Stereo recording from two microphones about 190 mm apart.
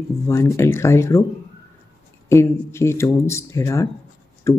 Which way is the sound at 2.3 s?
15° left (ahead or behind).